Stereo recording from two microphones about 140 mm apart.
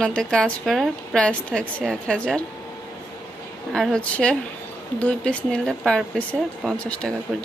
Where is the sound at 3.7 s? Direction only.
5° left (ahead or behind).